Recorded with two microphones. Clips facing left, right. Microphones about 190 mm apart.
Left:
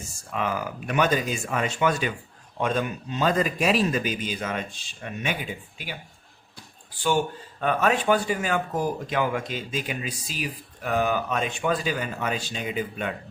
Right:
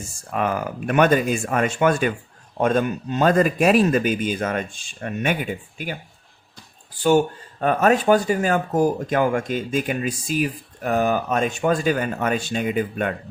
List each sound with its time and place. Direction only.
0.3 s speech: 50° right (ahead or behind)
7.6 s speech: 45° right (ahead or behind)